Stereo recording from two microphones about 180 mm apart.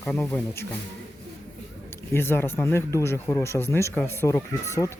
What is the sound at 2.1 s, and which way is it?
Speech, 15° left (ahead or behind).